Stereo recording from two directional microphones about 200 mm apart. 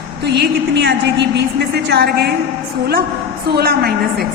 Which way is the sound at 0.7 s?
60° right (ahead or behind).